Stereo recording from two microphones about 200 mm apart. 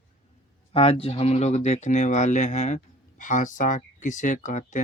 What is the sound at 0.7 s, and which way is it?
Speech, 30° left (ahead or behind).